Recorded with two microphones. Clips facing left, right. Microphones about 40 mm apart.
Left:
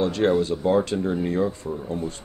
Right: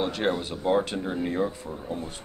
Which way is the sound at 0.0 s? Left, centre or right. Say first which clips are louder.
Left 6 dB; centre.